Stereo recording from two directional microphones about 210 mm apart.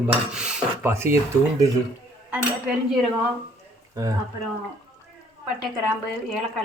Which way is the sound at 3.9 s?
15° right (ahead or behind).